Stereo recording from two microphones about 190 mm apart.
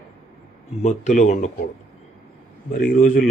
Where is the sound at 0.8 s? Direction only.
35° left (ahead or behind).